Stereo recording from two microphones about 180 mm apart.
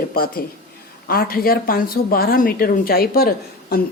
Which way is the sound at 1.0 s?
55° left (ahead or behind).